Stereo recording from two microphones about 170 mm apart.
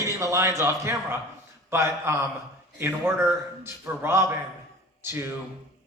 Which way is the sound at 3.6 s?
15° right (ahead or behind).